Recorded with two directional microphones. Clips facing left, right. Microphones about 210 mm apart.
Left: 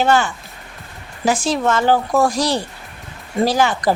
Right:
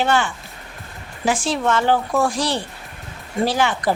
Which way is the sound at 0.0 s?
40° left (ahead or behind).